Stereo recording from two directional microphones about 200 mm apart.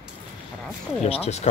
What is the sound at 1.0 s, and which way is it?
Speech, 30° left (ahead or behind).